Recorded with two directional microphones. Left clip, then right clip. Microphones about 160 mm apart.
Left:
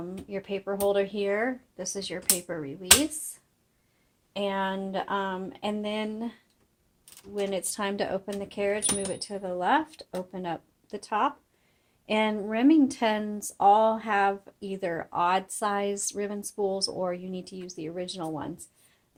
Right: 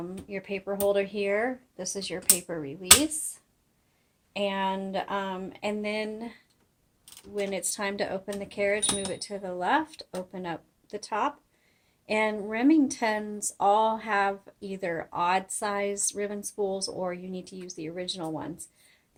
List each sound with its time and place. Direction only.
0.3 s speech: 30° left (ahead or behind)
4.3 s speech: 35° left (ahead or behind)
7.3 s speech: 35° left (ahead or behind)